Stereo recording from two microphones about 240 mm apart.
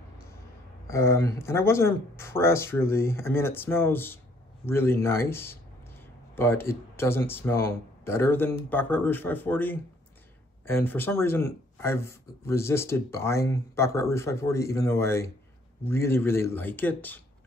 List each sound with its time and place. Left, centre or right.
0.8 s speech: centre